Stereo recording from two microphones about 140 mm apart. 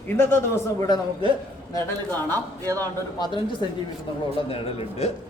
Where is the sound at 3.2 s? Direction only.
35° left (ahead or behind).